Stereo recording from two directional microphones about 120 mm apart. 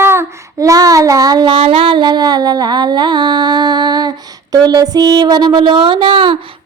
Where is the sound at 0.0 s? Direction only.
20° right (ahead or behind).